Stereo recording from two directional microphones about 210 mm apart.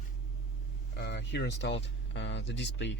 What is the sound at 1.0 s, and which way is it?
A man's voice, 55° left (ahead or behind).